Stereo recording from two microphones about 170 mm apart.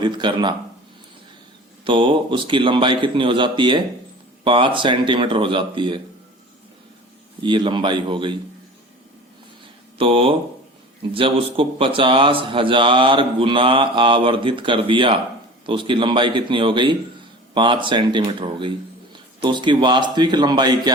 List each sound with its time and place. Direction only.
0.0 s a man's voice: 25° right (ahead or behind)
1.8 s a man's voice: 30° right (ahead or behind)
7.4 s a man's voice: 30° right (ahead or behind)
10.0 s a man's voice: 30° right (ahead or behind)